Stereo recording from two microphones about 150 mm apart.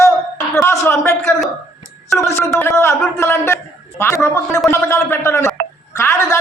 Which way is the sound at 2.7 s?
15° left (ahead or behind).